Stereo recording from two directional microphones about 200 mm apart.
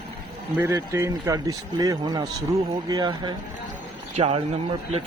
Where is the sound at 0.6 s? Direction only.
15° right (ahead or behind).